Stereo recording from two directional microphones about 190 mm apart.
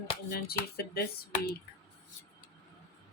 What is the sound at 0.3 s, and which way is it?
Speech, 55° left (ahead or behind).